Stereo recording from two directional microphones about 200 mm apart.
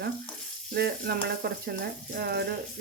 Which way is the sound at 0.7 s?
50° right (ahead or behind).